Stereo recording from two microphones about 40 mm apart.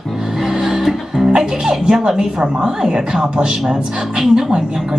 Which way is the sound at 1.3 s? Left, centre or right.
Centre.